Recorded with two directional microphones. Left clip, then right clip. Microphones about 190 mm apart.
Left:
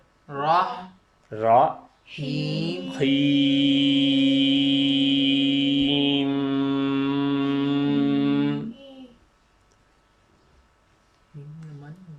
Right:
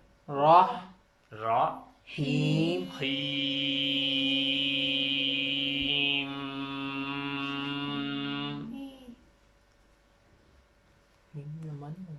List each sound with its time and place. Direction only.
0.3 s speech: 15° right (ahead or behind)
1.3 s speech: 40° left (ahead or behind)
2.3 s mantra: 15° right (ahead or behind)
2.9 s mantra: 40° left (ahead or behind)